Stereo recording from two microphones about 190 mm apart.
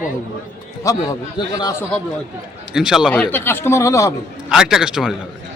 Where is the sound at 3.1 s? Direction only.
10° left (ahead or behind).